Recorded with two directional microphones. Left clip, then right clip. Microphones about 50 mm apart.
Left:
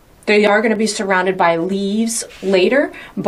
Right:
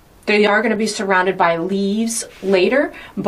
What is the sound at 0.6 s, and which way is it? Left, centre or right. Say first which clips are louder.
A woman's voice: left 2 dB; left.